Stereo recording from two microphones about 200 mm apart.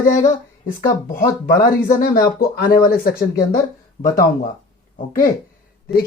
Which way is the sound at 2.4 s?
50° left (ahead or behind).